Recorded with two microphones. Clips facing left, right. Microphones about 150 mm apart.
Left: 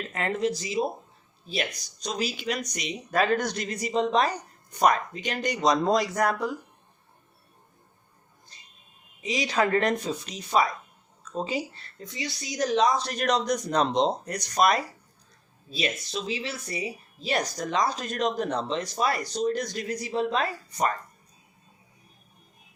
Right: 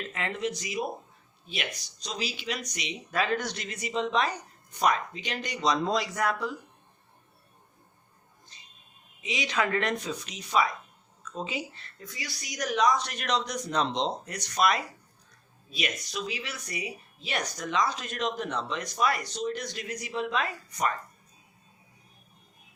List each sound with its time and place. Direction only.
0.1 s speech: 40° left (ahead or behind)
2.0 s speech: 45° left (ahead or behind)
9.2 s speech: 40° left (ahead or behind)
12.0 s a woman's voice: 25° left (ahead or behind); by 14.8 s 40° left (ahead or behind)
15.7 s speech: 30° left (ahead or behind)